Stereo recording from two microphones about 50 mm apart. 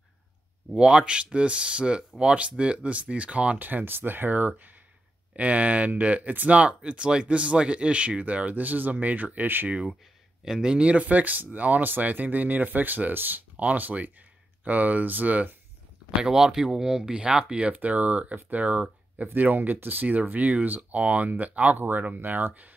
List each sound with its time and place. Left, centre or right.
0.7 s speech: centre
3.5 s speech: right
10.4 s speech: centre; by 15.5 s right
16.2 s speech: centre
17.6 s speech: right
22.5 s speech: right